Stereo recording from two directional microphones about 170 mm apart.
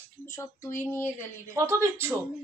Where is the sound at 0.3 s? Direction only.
15° left (ahead or behind).